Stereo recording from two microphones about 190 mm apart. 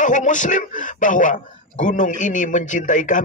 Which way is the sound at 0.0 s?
40° left (ahead or behind).